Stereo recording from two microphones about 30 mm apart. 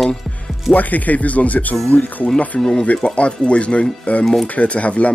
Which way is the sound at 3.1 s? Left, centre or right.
Left.